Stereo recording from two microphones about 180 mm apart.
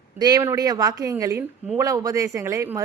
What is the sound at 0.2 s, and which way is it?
A woman's voice, 20° right (ahead or behind).